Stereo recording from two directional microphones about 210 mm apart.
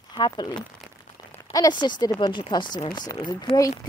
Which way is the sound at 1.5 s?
20° left (ahead or behind).